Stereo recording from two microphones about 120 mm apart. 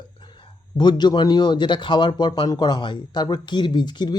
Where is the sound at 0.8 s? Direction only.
35° left (ahead or behind).